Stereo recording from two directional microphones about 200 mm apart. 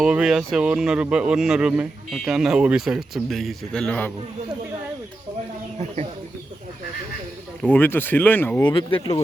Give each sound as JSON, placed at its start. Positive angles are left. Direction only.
{"t": 0.0, "sound": "speech", "side_deg": -5}
{"t": 7.6, "sound": "speech", "side_deg": 10}
{"t": 8.6, "sound": "speech", "side_deg": 25}